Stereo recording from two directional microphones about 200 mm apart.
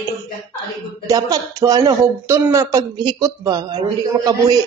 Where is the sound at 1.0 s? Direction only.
20° right (ahead or behind).